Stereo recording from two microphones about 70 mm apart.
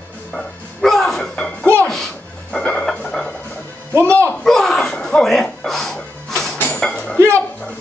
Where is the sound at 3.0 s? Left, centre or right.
Centre.